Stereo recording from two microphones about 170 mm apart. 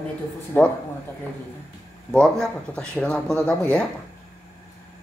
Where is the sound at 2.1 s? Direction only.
5° left (ahead or behind).